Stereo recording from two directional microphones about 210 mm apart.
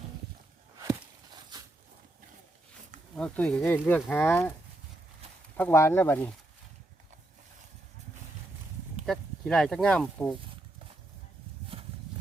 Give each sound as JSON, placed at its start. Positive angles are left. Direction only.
{"t": 3.2, "sound": "speech", "side_deg": 5}
{"t": 5.2, "sound": "a sound", "side_deg": -30}
{"t": 5.5, "sound": "speech", "side_deg": 10}
{"t": 9.0, "sound": "speech", "side_deg": 0}